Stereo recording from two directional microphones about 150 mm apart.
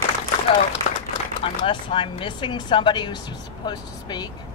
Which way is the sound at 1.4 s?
35° left (ahead or behind).